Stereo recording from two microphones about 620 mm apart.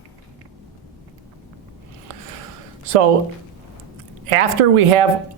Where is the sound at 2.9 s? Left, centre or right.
Right.